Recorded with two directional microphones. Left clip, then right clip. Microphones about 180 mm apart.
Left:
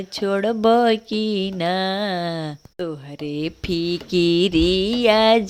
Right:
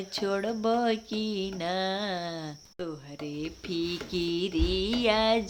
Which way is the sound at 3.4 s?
40° left (ahead or behind).